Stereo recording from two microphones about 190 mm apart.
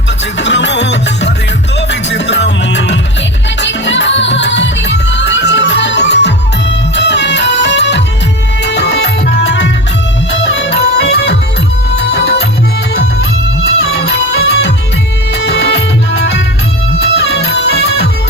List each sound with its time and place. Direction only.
0.3 s music: 70° left (ahead or behind)
14.3 s music: 60° left (ahead or behind)